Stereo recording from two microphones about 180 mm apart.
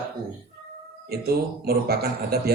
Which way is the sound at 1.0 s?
60° right (ahead or behind).